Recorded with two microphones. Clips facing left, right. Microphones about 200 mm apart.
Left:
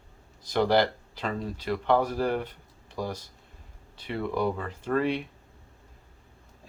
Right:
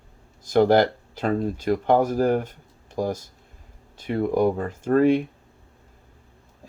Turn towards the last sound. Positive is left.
turn(degrees=-45)  # may be behind; listen again after turning